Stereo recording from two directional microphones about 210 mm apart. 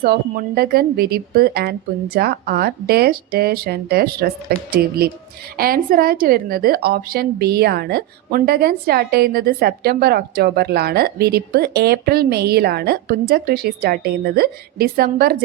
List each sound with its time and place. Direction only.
0.0 s a woman's voice: 50° right (ahead or behind)